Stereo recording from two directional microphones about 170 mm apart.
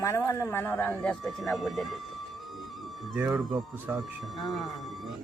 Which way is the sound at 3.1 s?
10° right (ahead or behind).